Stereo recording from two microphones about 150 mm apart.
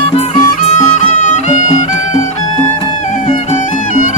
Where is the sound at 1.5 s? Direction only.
50° left (ahead or behind).